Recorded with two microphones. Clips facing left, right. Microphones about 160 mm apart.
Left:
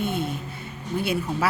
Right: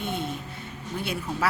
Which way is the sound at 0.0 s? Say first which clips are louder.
Left 4 dB; 5° left (ahead or behind).